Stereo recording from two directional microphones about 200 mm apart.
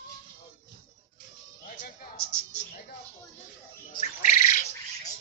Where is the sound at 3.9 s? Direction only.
35° left (ahead or behind).